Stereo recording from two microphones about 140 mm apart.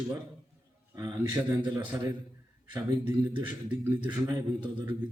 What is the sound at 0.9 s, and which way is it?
A man's voice, 20° right (ahead or behind).